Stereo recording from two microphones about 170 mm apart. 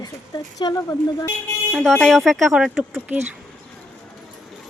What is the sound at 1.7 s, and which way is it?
Speech, 5° left (ahead or behind).